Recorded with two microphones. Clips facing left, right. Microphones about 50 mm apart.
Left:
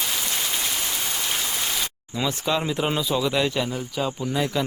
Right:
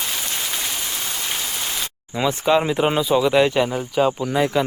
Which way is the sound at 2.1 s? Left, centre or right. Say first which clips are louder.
Right 7 dB; right.